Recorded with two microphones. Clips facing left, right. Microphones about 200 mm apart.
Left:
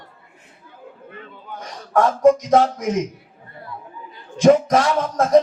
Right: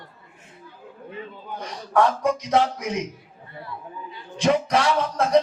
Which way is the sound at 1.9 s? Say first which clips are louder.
Left 6 dB; 45° left (ahead or behind).